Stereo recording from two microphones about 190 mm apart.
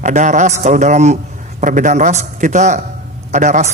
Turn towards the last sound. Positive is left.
turn(degrees=-40)  # may be behind; listen again after turning